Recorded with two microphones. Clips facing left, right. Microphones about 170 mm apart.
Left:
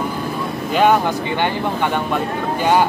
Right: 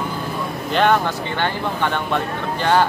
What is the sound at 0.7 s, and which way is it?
Speech, 10° left (ahead or behind).